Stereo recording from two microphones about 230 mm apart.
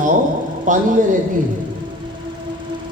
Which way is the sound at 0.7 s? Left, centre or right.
Right.